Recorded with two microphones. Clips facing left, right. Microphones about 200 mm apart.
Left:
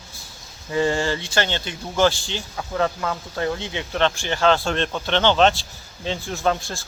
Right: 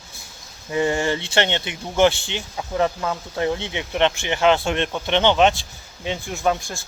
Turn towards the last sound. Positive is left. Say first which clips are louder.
# even
turn(degrees=-15)  # may be behind; listen again after turning